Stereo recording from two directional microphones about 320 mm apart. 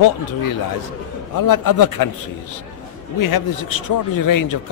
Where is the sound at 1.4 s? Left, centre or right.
Left.